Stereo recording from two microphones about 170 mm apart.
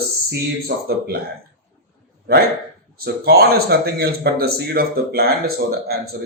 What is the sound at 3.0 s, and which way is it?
A man's voice, 65° right (ahead or behind).